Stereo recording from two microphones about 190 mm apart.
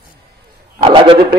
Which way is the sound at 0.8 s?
30° right (ahead or behind).